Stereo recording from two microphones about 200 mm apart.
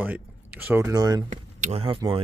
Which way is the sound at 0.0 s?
10° right (ahead or behind).